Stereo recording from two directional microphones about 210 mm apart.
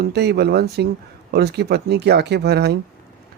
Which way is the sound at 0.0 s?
50° right (ahead or behind).